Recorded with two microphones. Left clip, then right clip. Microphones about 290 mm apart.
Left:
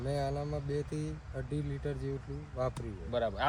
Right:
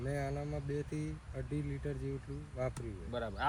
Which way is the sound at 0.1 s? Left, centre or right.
Centre.